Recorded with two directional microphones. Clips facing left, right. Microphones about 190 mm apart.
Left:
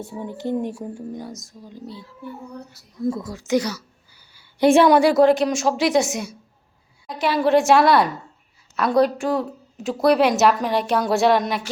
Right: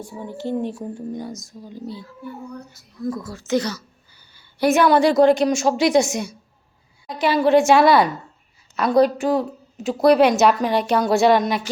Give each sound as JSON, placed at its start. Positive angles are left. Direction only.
{"t": 0.0, "sound": "speech", "side_deg": 20}
{"t": 3.0, "sound": "speech", "side_deg": 25}
{"t": 4.6, "sound": "a woman's voice", "side_deg": 25}
{"t": 4.9, "sound": "a woman's voice", "side_deg": 10}